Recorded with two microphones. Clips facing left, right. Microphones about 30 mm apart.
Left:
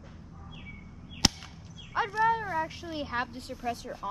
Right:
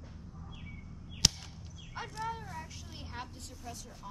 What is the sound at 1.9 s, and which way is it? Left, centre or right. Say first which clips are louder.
Speech: left 13 dB; left.